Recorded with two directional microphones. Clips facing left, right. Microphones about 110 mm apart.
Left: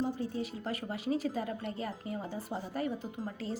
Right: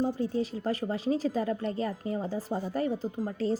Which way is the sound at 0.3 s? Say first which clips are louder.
Right 7 dB; 35° right (ahead or behind).